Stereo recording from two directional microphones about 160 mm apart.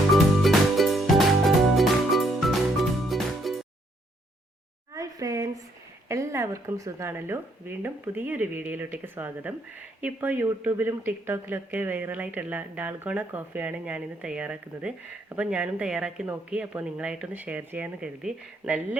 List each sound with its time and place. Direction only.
0.1 s music: centre (ahead or behind)
4.9 s a sound: 20° right (ahead or behind)
6.1 s speech: 20° right (ahead or behind)